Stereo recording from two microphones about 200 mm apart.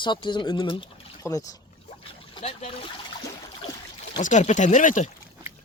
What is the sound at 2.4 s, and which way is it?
Speech, 35° left (ahead or behind).